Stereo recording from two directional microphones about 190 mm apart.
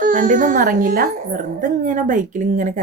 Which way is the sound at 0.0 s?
45° right (ahead or behind).